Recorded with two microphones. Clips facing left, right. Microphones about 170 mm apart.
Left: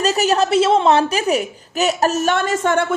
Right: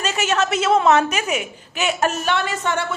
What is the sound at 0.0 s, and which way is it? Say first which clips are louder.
A woman's voice: left 5 dB; 35° left (ahead or behind).